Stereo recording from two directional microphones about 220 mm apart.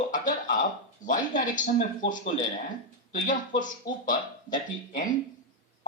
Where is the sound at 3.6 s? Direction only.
35° left (ahead or behind).